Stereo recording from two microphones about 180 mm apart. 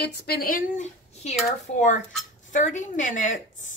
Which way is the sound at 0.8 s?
35° left (ahead or behind).